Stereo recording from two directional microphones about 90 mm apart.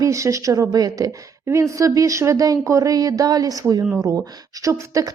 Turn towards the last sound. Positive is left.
turn(degrees=-40)  # may be behind; listen again after turning